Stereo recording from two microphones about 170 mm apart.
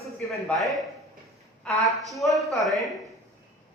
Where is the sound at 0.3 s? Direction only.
Centre (ahead or behind).